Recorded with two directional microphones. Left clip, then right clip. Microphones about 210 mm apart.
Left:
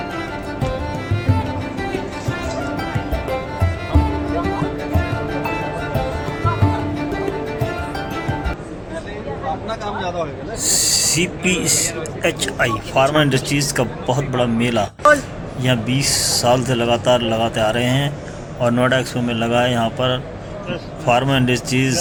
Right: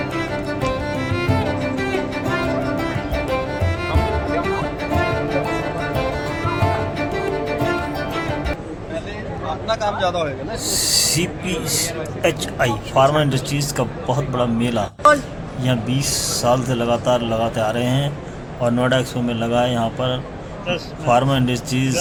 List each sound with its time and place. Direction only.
0.0 s music: centre (ahead or behind)
9.6 s a sound: 50° right (ahead or behind)
10.7 s a man's voice: 5° left (ahead or behind)